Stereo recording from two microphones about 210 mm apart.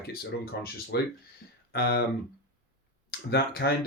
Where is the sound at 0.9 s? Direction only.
50° left (ahead or behind).